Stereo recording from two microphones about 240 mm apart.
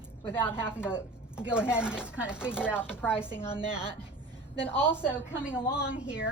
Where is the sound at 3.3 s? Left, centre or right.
Centre.